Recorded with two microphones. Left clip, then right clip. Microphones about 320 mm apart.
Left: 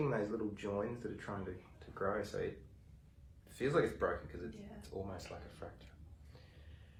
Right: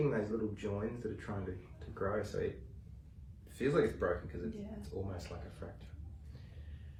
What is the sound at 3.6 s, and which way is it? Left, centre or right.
Speech, centre.